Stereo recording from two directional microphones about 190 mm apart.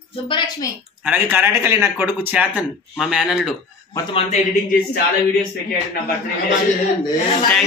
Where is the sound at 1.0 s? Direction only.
10° right (ahead or behind).